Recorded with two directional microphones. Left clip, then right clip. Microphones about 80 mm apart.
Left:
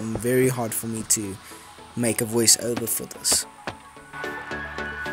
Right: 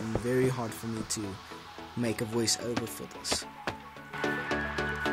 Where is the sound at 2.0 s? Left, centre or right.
Left.